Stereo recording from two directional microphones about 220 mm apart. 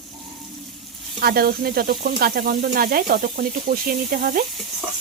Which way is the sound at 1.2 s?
45° right (ahead or behind).